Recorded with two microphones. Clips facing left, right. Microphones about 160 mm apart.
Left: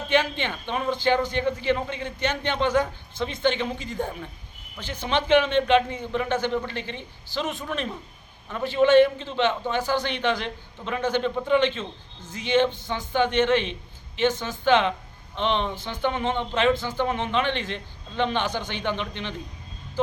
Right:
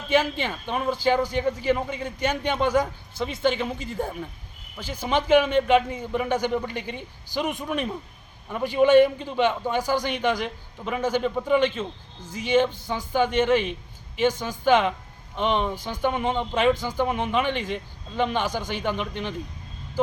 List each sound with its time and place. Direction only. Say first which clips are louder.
0.1 s a man's voice: right 1 dB; 5° right (ahead or behind)